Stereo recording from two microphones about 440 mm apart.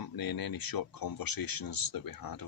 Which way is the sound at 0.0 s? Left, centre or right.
Left.